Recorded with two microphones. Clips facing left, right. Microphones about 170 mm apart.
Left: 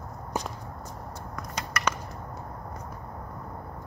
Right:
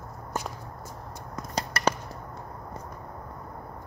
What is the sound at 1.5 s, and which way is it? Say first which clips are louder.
Chop: right 4 dB; 30° right (ahead or behind).